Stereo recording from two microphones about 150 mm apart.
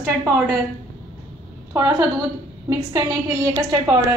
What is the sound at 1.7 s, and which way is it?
A woman's voice, 15° right (ahead or behind).